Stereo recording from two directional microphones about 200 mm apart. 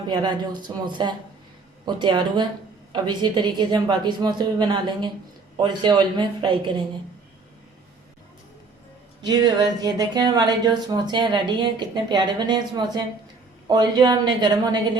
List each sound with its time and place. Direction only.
0.1 s speech: 20° right (ahead or behind)
9.2 s speech: 20° right (ahead or behind)